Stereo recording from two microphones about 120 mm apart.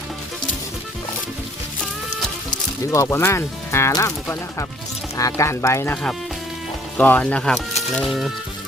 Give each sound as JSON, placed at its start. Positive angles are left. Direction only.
{"t": 2.9, "sound": "speech", "side_deg": 25}